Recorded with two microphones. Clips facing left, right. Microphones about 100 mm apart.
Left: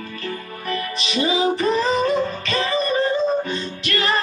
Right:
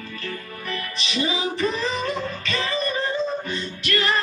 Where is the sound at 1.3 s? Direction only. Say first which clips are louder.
Left 7 dB; 20° left (ahead or behind).